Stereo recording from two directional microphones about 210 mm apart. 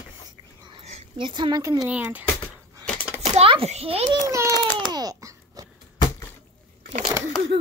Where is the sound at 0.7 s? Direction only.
30° right (ahead or behind).